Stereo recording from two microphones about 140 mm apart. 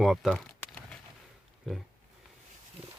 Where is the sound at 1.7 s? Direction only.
Centre (ahead or behind).